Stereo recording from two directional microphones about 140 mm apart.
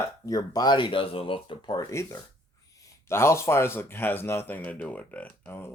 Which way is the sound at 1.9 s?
20° left (ahead or behind).